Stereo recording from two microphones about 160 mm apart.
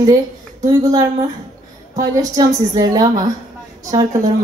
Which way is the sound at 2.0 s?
20° right (ahead or behind).